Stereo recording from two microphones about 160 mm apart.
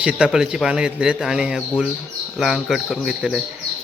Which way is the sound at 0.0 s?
5° right (ahead or behind).